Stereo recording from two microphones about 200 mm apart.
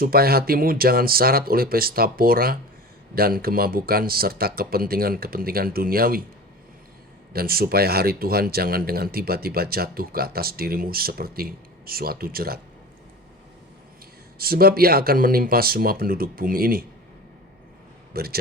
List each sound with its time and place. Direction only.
0.0 s speech: 50° right (ahead or behind)
7.3 s speech: 50° right (ahead or behind)
14.3 s speech: 50° right (ahead or behind)
18.1 s speech: 50° right (ahead or behind)